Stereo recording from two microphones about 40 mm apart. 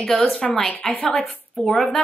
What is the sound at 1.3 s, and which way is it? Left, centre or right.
Speech, centre.